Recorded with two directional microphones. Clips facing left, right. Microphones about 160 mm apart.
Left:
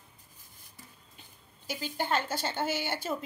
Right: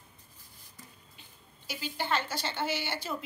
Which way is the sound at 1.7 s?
45° left (ahead or behind).